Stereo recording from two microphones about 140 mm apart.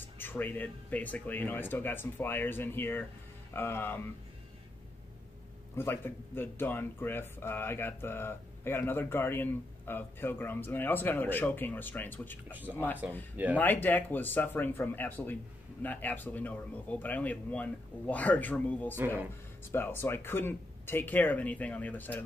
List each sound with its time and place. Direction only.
0.2 s speech: 15° left (ahead or behind)
5.8 s speech: 15° left (ahead or behind)